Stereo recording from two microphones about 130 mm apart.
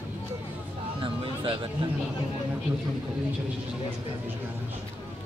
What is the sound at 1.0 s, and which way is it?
Music, 45° right (ahead or behind).